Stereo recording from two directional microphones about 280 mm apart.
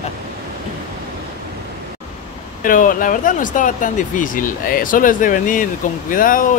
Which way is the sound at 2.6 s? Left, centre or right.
Left.